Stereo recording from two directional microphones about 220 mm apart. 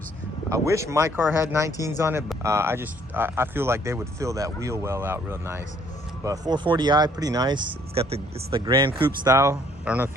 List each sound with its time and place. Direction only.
0.5 s speech: 15° right (ahead or behind)